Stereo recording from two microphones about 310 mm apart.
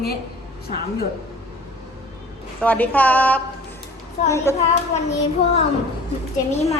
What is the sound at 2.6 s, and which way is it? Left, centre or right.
A woman's voice, centre.